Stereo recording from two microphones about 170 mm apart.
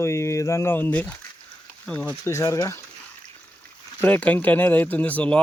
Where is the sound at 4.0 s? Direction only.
10° left (ahead or behind).